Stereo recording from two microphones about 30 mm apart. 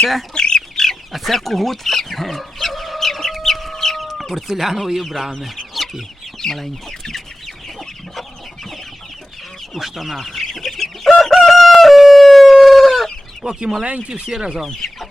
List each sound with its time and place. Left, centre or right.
0.3 s chicken: left
1.1 s speech: centre
3.4 s chicken: centre
4.0 s speech: centre
5.7 s chicken: centre
6.4 s chicken: centre
9.7 s chicken: centre
11.2 s crowing: centre
12.2 s chicken: centre
13.4 s speech: right